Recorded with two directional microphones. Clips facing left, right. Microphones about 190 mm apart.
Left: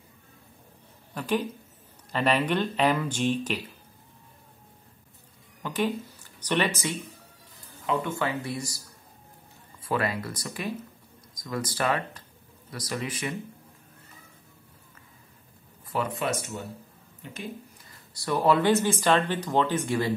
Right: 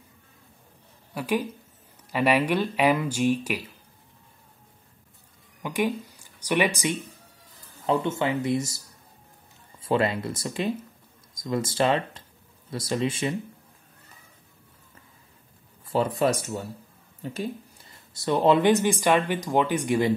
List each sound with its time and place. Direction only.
1.1 s speech: 10° right (ahead or behind)
5.6 s speech: 15° right (ahead or behind)
7.8 s speech: 35° right (ahead or behind)
8.1 s speech: 20° right (ahead or behind)
16.2 s speech: 35° right (ahead or behind)
17.2 s a sound: 35° right (ahead or behind)
18.1 s speech: 20° right (ahead or behind)